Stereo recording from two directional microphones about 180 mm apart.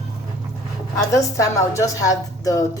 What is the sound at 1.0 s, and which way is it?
A woman's voice, 15° left (ahead or behind).